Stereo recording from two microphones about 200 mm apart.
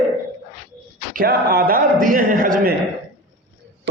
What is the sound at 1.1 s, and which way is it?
Speech, 50° right (ahead or behind).